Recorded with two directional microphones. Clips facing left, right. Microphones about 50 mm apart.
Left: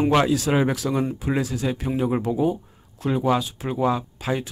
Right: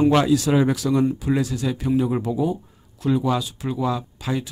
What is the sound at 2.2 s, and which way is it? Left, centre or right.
Speech, left.